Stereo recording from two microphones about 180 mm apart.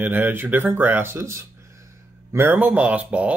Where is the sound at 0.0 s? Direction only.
10° right (ahead or behind).